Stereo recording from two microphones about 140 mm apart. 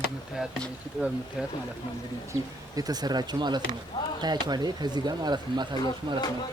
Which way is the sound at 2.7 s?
25° right (ahead or behind).